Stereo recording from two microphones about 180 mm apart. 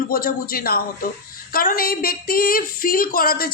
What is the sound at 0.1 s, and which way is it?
Speech, 55° left (ahead or behind).